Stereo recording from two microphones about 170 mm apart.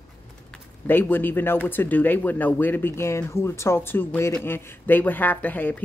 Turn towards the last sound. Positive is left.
turn(degrees=10)  # may be behind; listen again after turning